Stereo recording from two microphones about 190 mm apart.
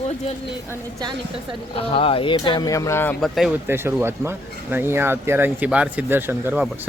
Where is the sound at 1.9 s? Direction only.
30° left (ahead or behind); by 3.2 s 10° left (ahead or behind).